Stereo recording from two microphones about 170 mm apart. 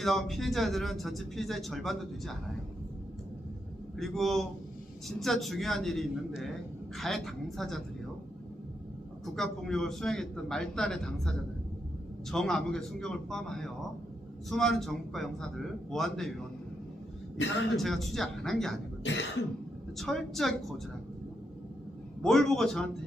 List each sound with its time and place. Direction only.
0.0 s speech: centre (ahead or behind)
3.9 s speech: centre (ahead or behind)
9.2 s speech: 5° left (ahead or behind)
17.3 s throat clearing: 90° left
17.7 s speech: centre (ahead or behind)
19.0 s throat clearing: 90° left
20.0 s speech: centre (ahead or behind)
22.2 s speech: centre (ahead or behind)